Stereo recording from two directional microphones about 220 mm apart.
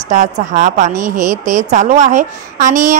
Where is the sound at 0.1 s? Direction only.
35° right (ahead or behind).